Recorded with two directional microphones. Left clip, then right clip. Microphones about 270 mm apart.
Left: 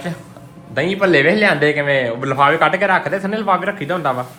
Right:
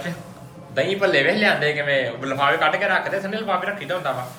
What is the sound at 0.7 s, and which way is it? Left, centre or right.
Speech, centre.